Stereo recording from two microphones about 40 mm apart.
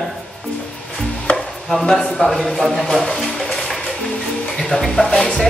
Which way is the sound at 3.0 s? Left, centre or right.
Centre.